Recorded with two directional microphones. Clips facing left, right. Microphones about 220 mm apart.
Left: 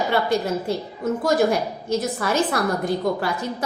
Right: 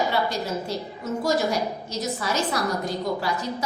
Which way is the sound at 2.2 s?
55° left (ahead or behind).